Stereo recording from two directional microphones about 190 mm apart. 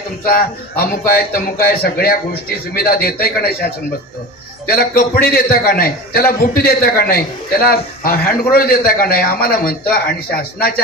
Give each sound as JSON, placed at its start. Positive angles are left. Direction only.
{"t": 0.2, "sound": "a man's voice", "side_deg": 50}